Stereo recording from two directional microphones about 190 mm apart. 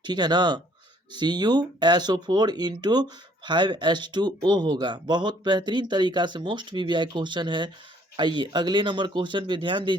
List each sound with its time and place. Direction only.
0.0 s speech: 20° right (ahead or behind)